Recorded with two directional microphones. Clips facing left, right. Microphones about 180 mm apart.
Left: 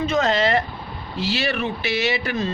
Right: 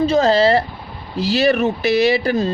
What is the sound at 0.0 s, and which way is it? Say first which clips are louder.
Speech: right 6 dB; 30° right (ahead or behind).